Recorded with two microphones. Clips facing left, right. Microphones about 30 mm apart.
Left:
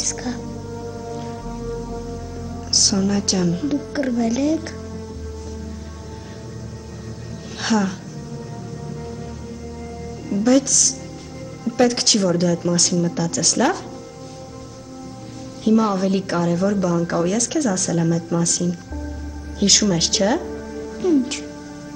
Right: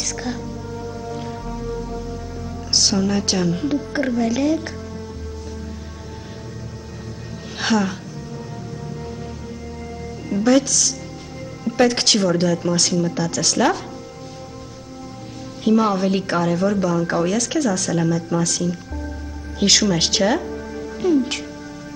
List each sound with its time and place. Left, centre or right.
0.0 s music: centre
2.7 s a woman's voice: centre
7.5 s music: centre
10.3 s a woman's voice: centre
15.6 s a woman's voice: centre
20.4 s music: centre